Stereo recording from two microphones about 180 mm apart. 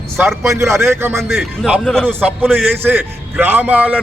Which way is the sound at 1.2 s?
Centre (ahead or behind).